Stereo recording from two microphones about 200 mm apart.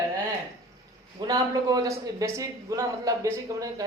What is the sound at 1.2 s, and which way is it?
A man's voice, 20° right (ahead or behind).